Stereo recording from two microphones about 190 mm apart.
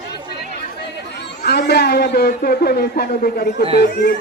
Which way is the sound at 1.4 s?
60° left (ahead or behind).